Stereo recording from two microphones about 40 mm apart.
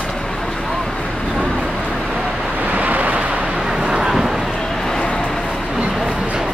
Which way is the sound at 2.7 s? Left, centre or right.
Right.